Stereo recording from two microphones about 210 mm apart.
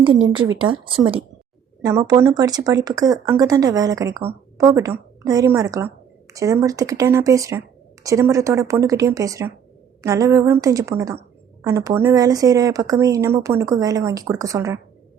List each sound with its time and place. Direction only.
0.3 s a woman's voice: 20° right (ahead or behind)